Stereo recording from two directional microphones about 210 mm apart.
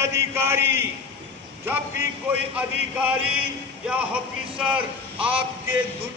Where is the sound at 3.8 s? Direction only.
5° right (ahead or behind).